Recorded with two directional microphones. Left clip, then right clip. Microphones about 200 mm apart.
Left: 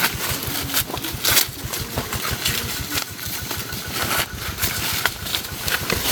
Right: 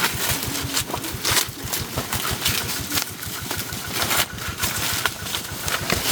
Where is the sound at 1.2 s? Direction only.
40° left (ahead or behind).